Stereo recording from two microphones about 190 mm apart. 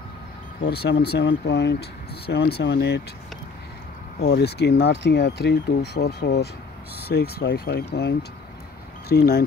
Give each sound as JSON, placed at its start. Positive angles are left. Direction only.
{"t": 0.7, "sound": "speech", "side_deg": 60}
{"t": 4.2, "sound": "speech", "side_deg": 60}